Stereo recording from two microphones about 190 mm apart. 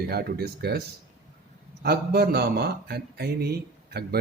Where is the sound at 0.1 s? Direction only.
55° right (ahead or behind).